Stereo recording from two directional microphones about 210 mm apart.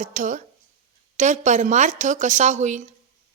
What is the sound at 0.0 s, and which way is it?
A woman's voice, 40° right (ahead or behind).